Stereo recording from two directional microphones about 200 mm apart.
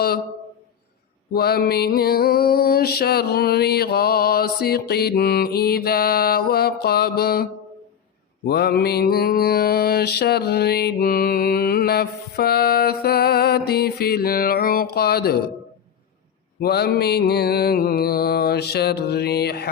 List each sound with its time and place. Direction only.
1.3 s mantra: 50° left (ahead or behind)
8.4 s mantra: 55° left (ahead or behind)
16.6 s mantra: 55° left (ahead or behind)